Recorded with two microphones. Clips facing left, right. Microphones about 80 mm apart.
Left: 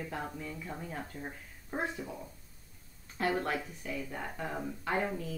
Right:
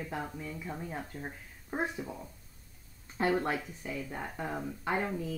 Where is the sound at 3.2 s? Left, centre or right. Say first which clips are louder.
Right 3 dB; right.